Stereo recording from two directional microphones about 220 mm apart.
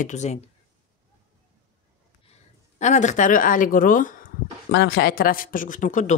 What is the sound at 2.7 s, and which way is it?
Speech, 35° left (ahead or behind).